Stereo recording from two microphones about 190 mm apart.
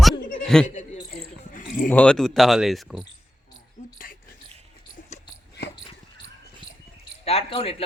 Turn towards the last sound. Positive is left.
turn(degrees=30)  # may be behind; listen again after turning